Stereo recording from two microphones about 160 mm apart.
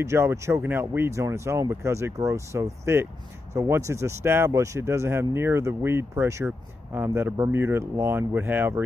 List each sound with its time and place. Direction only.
0.0 s speech: 15° right (ahead or behind)